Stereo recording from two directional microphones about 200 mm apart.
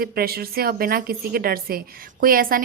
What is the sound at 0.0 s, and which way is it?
A woman's voice, 50° right (ahead or behind).